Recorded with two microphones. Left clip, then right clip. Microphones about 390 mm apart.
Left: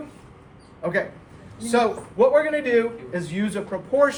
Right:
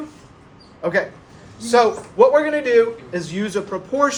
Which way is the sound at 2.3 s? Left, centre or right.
Centre.